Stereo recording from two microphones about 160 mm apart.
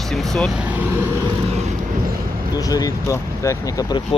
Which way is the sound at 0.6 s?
10° right (ahead or behind).